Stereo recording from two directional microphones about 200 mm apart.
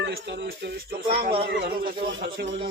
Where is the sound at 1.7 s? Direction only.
25° right (ahead or behind).